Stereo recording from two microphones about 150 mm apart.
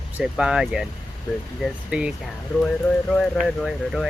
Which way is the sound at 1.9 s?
5° right (ahead or behind).